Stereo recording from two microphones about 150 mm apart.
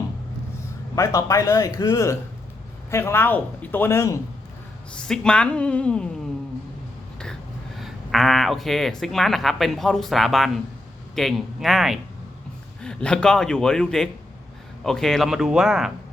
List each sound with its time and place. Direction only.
0.9 s a man's voice: 20° left (ahead or behind)
5.0 s speech: 5° left (ahead or behind)
7.8 s speech: centre (ahead or behind)